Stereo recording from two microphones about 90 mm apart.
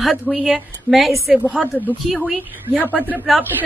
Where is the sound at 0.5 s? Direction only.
Centre (ahead or behind).